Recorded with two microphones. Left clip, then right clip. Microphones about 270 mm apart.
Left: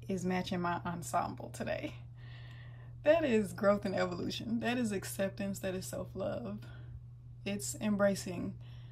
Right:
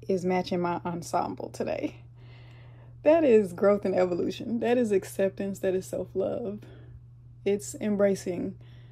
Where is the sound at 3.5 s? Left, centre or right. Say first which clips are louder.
Right 7 dB; centre.